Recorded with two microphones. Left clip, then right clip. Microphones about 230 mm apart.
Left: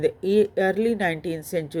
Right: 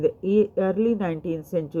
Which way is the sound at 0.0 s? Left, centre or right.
Left.